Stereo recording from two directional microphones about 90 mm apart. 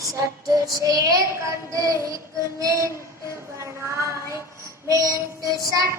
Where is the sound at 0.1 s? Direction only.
40° right (ahead or behind).